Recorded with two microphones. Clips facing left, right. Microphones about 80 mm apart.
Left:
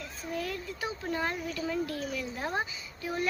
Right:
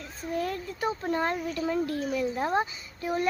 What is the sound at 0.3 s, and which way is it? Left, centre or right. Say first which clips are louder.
Speech: right 5 dB; right.